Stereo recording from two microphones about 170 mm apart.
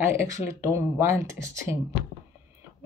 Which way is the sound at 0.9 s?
15° right (ahead or behind).